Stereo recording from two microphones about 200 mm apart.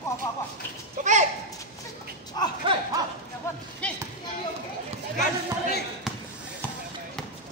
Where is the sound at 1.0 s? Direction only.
40° right (ahead or behind).